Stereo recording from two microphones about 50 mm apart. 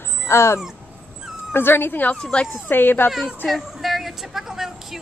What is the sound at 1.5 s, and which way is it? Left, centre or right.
Speech, left.